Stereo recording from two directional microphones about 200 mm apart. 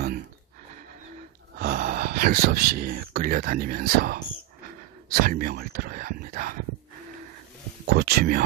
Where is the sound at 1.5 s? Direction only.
45° right (ahead or behind).